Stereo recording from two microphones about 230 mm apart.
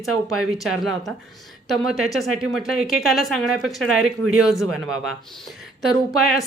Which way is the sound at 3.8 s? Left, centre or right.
Right.